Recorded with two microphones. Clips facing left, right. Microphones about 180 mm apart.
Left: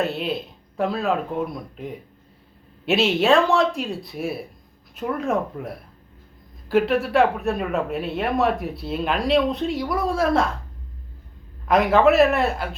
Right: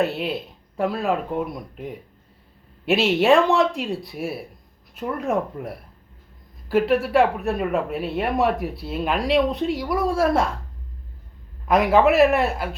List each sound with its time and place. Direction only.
0.0 s speech: 10° right (ahead or behind)
3.2 s speech: 20° right (ahead or behind)
4.1 s speech: 5° right (ahead or behind)
6.7 s speech: 5° right (ahead or behind)
11.7 s speech: 10° right (ahead or behind)